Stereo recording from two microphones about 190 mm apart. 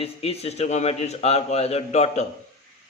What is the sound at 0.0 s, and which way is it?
A man's voice, 30° left (ahead or behind).